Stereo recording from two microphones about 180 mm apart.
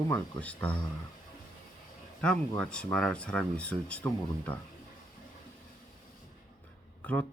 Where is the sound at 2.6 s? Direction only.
5° left (ahead or behind).